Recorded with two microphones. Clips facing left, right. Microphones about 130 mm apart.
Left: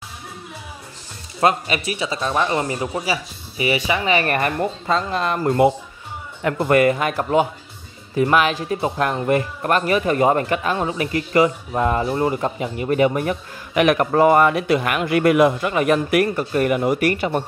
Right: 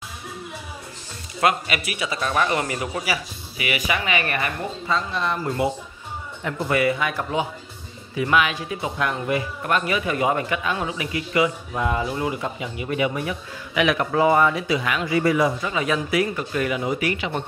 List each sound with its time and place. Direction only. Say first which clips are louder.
1.4 s speech: left 3 dB; 35° left (ahead or behind); by 16.3 s 60° left (ahead or behind)
16.3 s speech: left 5 dB; 40° left (ahead or behind)